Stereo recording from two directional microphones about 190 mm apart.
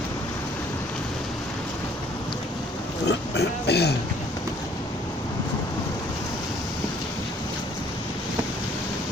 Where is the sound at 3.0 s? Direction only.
60° left (ahead or behind).